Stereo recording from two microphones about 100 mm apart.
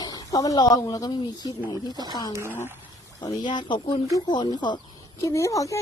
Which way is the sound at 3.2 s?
50° left (ahead or behind).